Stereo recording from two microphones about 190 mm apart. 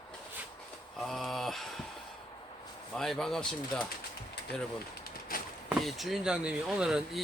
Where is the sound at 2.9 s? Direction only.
Centre (ahead or behind).